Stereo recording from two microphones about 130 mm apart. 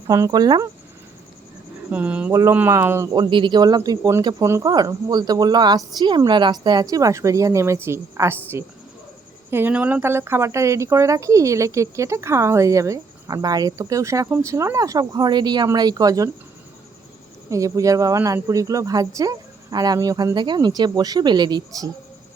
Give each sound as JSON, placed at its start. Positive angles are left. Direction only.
{"t": 0.1, "sound": "speech", "side_deg": -30}
{"t": 1.9, "sound": "speech", "side_deg": -10}
{"t": 3.2, "sound": "speech", "side_deg": -35}
{"t": 4.4, "sound": "speech", "side_deg": -20}
{"t": 4.7, "sound": "speech", "side_deg": -30}
{"t": 17.5, "sound": "speech", "side_deg": -25}